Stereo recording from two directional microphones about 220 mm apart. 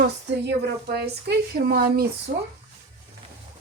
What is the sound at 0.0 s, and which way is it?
A woman's voice, 45° right (ahead or behind).